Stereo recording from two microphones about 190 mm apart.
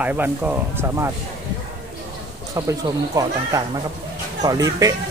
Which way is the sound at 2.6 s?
15° right (ahead or behind).